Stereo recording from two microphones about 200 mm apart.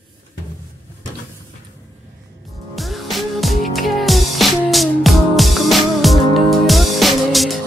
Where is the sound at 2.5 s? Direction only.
Centre (ahead or behind).